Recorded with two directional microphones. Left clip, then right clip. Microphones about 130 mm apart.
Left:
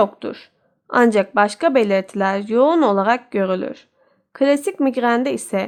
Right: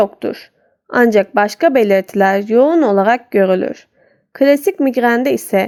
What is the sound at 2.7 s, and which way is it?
Speech, centre (ahead or behind).